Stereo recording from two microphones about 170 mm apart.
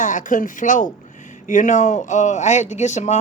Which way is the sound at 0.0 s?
50° left (ahead or behind).